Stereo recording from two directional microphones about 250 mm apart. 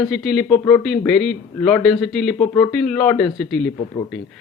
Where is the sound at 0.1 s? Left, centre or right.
Centre.